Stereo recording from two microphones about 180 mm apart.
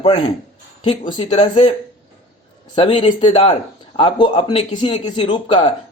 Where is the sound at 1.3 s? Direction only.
40° left (ahead or behind).